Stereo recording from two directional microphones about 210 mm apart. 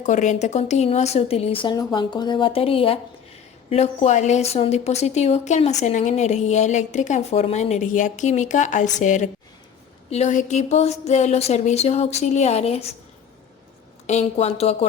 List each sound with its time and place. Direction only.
0.0 s a woman's voice: 35° left (ahead or behind)
14.1 s speech: 30° left (ahead or behind)